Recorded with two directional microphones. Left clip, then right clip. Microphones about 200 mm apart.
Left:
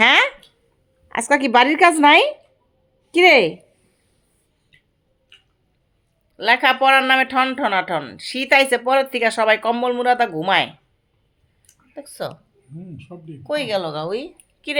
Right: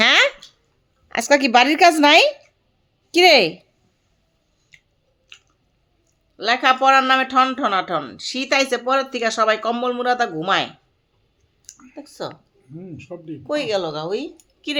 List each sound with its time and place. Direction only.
0.0 s a sound: 15° right (ahead or behind)
1.0 s a woman's voice: 25° right (ahead or behind)
6.3 s speech: 5° left (ahead or behind)
11.9 s speech: centre (ahead or behind)
13.1 s speech: 50° right (ahead or behind)
13.5 s speech: centre (ahead or behind)